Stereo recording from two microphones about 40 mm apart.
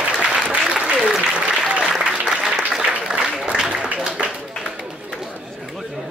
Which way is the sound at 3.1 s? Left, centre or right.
Right.